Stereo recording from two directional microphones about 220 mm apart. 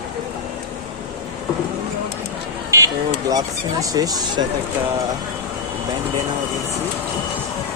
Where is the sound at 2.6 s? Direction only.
15° right (ahead or behind).